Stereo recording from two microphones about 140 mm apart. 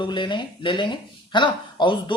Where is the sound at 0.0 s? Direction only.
35° left (ahead or behind).